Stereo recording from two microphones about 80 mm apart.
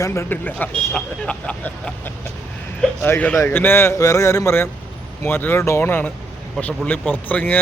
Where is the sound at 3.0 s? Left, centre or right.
Left.